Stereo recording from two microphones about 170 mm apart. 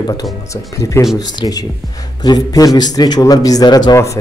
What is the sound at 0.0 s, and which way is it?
A man's voice, 25° left (ahead or behind).